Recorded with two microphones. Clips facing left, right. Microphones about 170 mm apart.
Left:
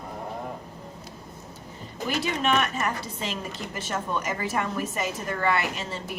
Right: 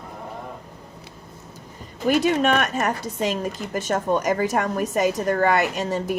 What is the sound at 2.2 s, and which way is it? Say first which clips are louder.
A woman's voice: right 2 dB; 45° right (ahead or behind).